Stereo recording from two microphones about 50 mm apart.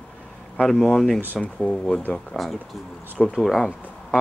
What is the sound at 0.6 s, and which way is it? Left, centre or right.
Speech, centre.